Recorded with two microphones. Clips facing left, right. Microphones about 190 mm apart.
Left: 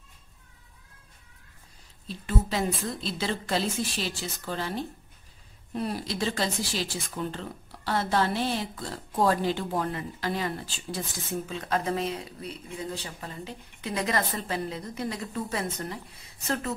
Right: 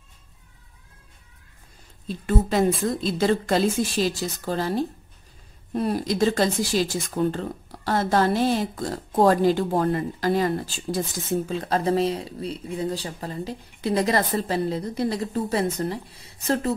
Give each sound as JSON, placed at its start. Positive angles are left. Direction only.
{"t": 2.0, "sound": "speech", "side_deg": -45}